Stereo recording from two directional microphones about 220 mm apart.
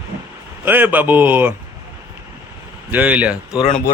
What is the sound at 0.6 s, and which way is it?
Speech, 10° right (ahead or behind).